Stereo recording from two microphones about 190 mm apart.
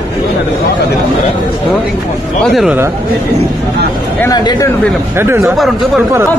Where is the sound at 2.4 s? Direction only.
Centre (ahead or behind).